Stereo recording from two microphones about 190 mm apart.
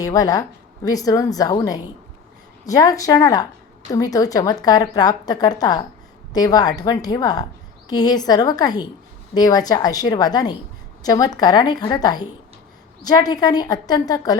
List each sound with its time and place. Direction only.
0.0 s a woman's voice: 20° left (ahead or behind)